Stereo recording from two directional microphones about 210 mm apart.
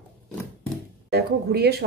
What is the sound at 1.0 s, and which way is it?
Speech, 50° right (ahead or behind).